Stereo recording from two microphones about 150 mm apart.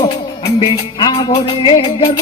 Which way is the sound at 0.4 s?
30° left (ahead or behind).